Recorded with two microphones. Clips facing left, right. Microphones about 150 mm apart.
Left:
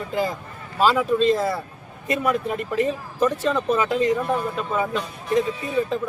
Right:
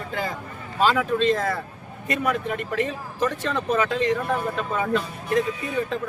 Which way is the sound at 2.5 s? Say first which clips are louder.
Left 3 dB; 35° left (ahead or behind).